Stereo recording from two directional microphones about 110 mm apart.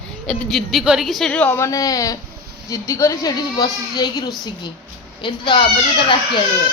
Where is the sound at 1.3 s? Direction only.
15° left (ahead or behind); by 4.3 s 35° left (ahead or behind).